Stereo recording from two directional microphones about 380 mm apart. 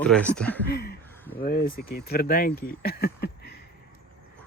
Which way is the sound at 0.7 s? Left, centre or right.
Left.